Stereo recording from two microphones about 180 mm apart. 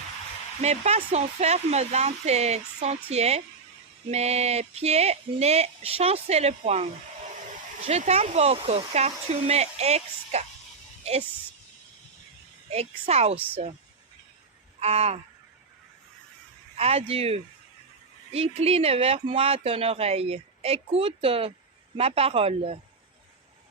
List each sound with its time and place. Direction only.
0.6 s speech: 35° right (ahead or behind)
12.7 s speech: 35° right (ahead or behind)
13.3 s a woman's voice: 10° right (ahead or behind)
14.8 s a sound: 35° right (ahead or behind)
16.7 s speech: 35° right (ahead or behind)